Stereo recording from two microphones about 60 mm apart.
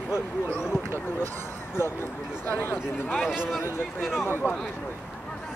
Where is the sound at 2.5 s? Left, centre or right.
Left.